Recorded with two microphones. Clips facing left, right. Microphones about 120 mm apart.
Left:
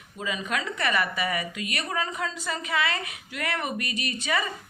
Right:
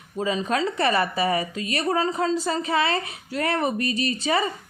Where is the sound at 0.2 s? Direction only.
35° right (ahead or behind).